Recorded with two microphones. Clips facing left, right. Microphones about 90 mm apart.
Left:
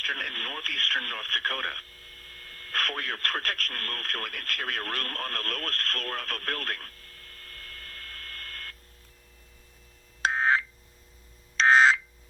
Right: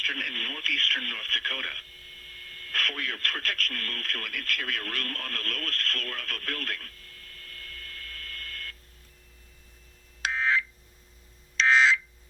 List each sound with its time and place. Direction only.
0.0 s speech: 40° left (ahead or behind)
10.2 s a sound: 40° left (ahead or behind)
11.5 s telephone dialing: 45° left (ahead or behind)